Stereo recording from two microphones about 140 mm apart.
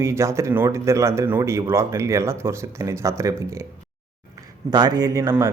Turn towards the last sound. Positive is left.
turn(degrees=-20)  # may be behind; listen again after turning